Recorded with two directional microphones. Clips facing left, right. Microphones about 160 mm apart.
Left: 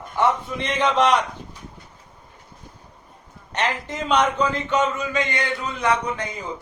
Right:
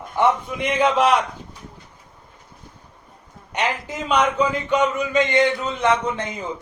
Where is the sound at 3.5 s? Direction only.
10° right (ahead or behind).